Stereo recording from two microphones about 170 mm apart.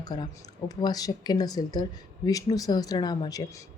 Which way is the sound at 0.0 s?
25° left (ahead or behind).